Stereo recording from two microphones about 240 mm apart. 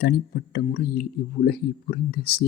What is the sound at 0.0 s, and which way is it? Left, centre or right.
Speech, left.